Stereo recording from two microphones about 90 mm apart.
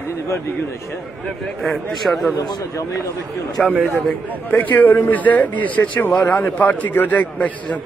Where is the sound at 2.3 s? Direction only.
45° left (ahead or behind).